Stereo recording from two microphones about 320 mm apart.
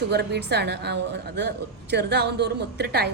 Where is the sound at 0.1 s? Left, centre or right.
Right.